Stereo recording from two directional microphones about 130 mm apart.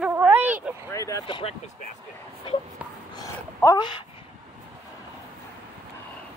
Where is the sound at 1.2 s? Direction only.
40° left (ahead or behind).